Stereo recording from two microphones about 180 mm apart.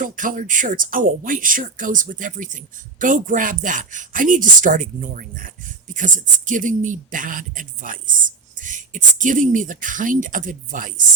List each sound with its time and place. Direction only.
0.0 s speech: 50° right (ahead or behind)